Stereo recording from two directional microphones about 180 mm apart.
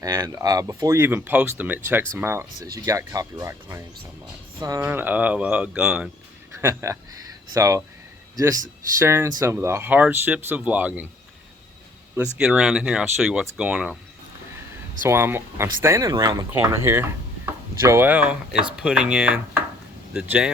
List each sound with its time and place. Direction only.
0.0 s speech: 20° right (ahead or behind)
9.0 s speech: 15° right (ahead or behind)
12.1 s speech: 5° right (ahead or behind)
15.0 s speech: 15° right (ahead or behind)